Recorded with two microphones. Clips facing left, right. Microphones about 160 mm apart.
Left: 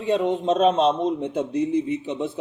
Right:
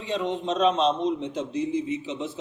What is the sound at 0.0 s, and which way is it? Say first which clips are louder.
A man's voice: left 6 dB; 50° left (ahead or behind).